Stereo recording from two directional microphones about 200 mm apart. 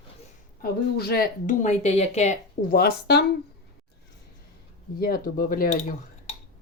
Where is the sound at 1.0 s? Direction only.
50° left (ahead or behind).